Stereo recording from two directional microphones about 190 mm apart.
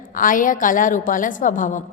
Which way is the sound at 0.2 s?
45° left (ahead or behind).